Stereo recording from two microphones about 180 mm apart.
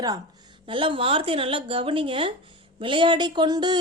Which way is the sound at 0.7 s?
30° right (ahead or behind).